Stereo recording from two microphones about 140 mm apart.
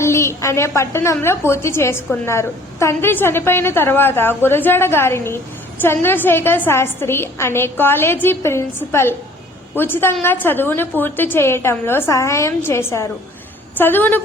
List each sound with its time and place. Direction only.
0.0 s a woman's voice: 20° left (ahead or behind)